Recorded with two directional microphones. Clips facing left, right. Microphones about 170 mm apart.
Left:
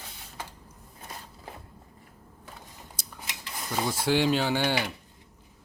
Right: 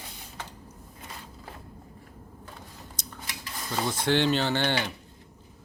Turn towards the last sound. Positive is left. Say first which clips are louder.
# even
turn(degrees=10)  # may be behind; listen again after turning